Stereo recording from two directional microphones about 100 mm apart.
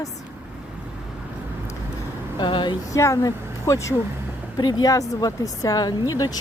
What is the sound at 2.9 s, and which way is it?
Speech, 30° left (ahead or behind).